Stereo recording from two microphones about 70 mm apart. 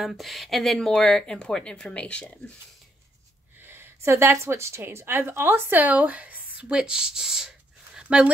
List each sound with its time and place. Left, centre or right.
0.0 s speech: centre
3.6 s a woman's voice: right
6.8 s speech: centre